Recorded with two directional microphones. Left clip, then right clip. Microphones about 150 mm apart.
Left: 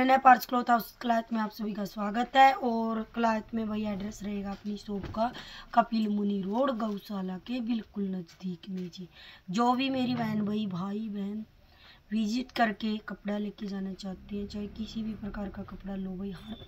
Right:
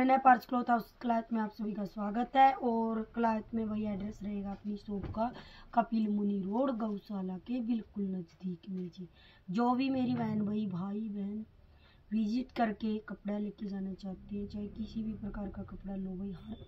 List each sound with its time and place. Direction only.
0.0 s speech: 15° left (ahead or behind)